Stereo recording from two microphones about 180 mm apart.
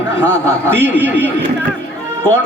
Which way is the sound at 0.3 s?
15° right (ahead or behind).